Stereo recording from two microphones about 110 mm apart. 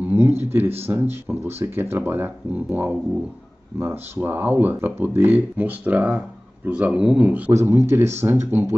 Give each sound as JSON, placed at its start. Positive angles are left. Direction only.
{"t": 0.0, "sound": "a sound", "side_deg": -20}
{"t": 0.9, "sound": "speech", "side_deg": -25}
{"t": 7.5, "sound": "speech", "side_deg": -25}